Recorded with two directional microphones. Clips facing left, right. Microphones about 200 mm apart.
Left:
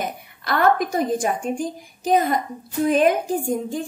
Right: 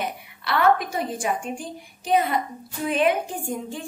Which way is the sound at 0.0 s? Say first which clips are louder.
Left 1 dB; 40° left (ahead or behind).